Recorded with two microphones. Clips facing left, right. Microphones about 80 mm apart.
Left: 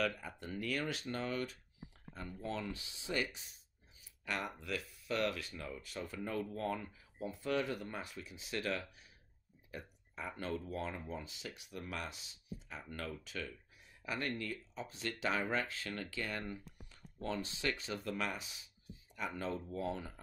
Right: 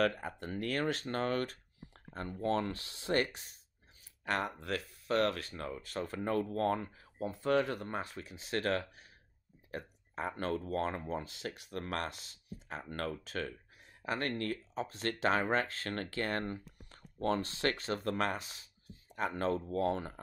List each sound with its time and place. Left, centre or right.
0.0 s speech: right
2.1 s speech: right
2.4 s speech: right
4.2 s speech: right